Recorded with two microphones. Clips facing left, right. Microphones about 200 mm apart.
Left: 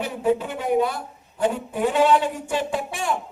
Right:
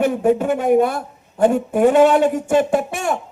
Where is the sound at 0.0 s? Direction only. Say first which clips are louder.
Right 6 dB; 50° right (ahead or behind).